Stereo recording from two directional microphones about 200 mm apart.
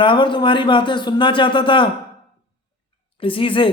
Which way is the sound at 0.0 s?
25° left (ahead or behind).